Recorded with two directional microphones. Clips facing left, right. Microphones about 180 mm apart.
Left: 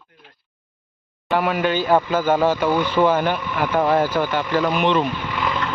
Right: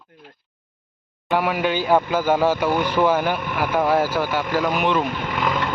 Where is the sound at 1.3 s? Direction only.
10° right (ahead or behind).